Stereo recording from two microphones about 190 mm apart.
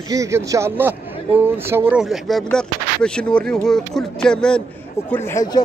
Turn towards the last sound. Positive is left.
turn(degrees=20)  # may be behind; listen again after turning